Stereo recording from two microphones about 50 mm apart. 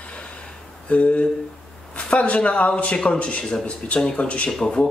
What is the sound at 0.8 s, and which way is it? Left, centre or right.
A man's voice, left.